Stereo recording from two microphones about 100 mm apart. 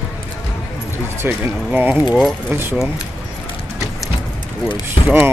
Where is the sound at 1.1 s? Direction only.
20° right (ahead or behind).